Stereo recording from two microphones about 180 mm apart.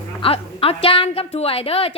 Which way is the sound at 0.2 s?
30° left (ahead or behind).